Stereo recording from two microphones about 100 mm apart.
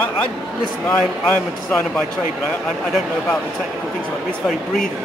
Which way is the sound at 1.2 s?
15° left (ahead or behind).